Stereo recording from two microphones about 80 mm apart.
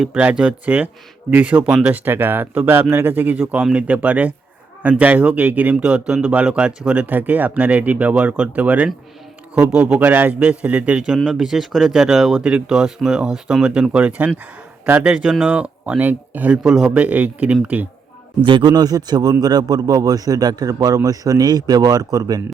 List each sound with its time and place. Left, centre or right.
0.0 s speech: centre
18.4 s a man's voice: right